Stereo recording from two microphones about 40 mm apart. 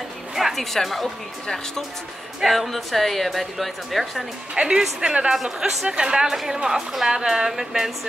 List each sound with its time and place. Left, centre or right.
0.4 s a sound: centre
0.8 s a woman's voice: centre
4.6 s speech: centre
5.3 s a woman's voice: centre
5.9 s speech: right
6.3 s a woman's voice: centre